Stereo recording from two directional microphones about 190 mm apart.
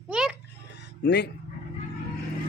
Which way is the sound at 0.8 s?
65° left (ahead or behind).